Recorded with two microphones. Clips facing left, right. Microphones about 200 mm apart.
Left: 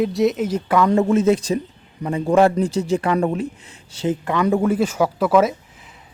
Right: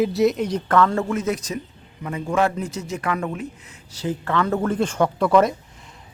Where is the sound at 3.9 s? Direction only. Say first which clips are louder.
Left 3 dB; 20° left (ahead or behind); by 5.6 s 5° left (ahead or behind).